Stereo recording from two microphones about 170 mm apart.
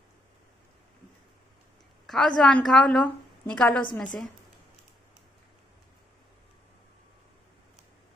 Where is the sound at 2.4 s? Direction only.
5° left (ahead or behind).